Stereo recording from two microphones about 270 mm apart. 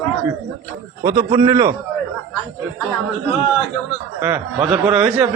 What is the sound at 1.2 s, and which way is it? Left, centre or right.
Speech, centre.